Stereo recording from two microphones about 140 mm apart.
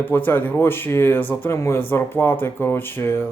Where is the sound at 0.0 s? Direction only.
15° left (ahead or behind).